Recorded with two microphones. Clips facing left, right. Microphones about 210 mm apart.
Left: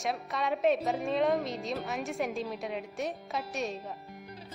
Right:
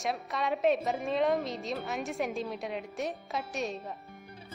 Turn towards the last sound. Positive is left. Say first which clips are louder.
# even
turn(degrees=0)  # may be behind; listen again after turning